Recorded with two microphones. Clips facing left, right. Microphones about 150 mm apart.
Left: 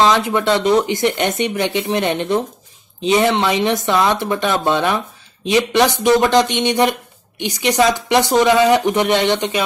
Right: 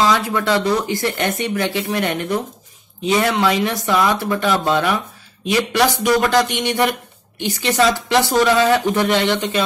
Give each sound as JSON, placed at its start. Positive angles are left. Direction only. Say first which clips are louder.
{"t": 0.0, "sound": "a man's voice", "louder": "left 3 dB", "side_deg": 20}